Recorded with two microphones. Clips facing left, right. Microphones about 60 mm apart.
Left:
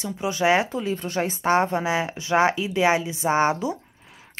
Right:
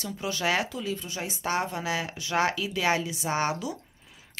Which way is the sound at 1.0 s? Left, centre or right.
Left.